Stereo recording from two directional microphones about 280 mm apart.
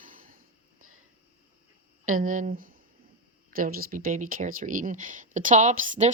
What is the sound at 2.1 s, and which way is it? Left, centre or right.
Speech, right.